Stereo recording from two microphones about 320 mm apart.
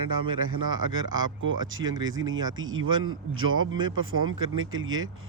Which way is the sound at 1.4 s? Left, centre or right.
Right.